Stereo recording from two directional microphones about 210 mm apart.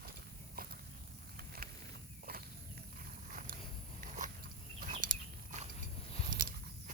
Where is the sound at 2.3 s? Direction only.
45° right (ahead or behind).